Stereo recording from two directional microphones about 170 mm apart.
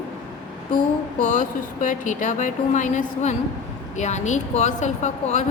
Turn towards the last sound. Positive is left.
turn(degrees=45)  # may be behind; listen again after turning